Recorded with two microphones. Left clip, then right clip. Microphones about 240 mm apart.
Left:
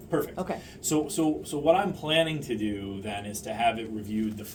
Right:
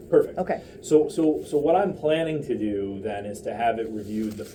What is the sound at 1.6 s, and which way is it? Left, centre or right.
A man's voice, left.